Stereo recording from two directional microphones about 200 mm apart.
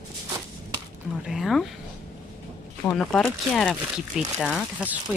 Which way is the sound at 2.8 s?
5° left (ahead or behind).